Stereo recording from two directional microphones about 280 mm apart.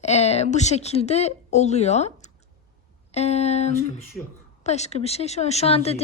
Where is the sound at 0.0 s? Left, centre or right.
Left.